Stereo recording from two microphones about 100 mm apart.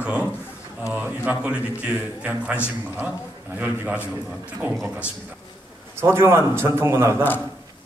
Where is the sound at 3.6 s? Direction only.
15° right (ahead or behind).